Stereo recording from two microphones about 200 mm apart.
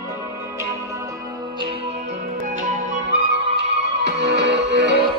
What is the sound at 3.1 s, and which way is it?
Music, 55° right (ahead or behind).